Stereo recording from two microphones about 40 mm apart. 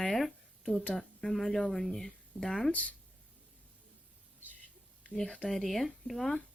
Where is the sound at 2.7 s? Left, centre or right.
Left.